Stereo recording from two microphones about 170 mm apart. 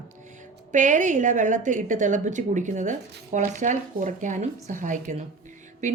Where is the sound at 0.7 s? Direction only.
50° right (ahead or behind).